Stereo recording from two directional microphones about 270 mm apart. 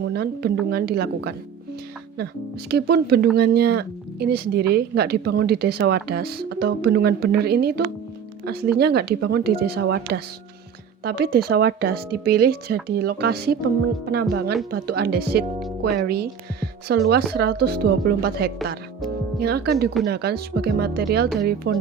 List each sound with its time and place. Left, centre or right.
0.0 s speech: right
2.6 s speech: right
8.8 s speech: right